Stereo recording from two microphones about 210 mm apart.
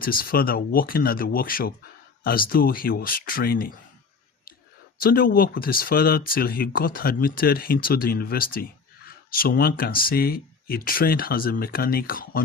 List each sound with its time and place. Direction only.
0.0 s speech: 45° left (ahead or behind)
4.9 s speech: 45° left (ahead or behind)